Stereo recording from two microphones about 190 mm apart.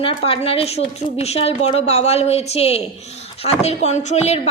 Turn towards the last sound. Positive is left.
turn(degrees=35)  # may be behind; listen again after turning